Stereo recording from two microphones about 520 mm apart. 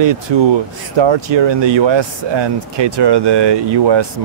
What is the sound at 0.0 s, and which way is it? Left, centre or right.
Speech, right.